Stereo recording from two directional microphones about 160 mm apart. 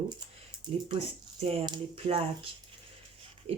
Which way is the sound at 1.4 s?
35° right (ahead or behind).